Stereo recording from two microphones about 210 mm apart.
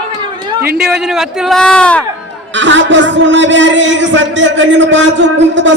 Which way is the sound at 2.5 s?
60° right (ahead or behind).